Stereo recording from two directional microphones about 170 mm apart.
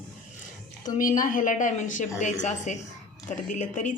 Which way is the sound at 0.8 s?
50° left (ahead or behind).